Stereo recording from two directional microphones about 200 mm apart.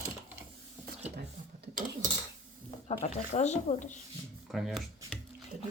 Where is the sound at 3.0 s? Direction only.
35° left (ahead or behind).